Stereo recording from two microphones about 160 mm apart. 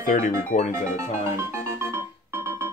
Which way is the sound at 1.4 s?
15° right (ahead or behind).